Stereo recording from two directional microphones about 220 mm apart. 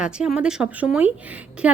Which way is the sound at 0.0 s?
5° right (ahead or behind).